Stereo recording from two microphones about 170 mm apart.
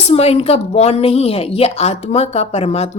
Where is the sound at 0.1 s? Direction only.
35° left (ahead or behind).